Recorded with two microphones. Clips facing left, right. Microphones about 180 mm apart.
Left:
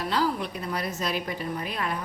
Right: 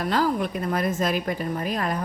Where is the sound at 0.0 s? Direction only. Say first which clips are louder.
Right 4 dB; 50° right (ahead or behind).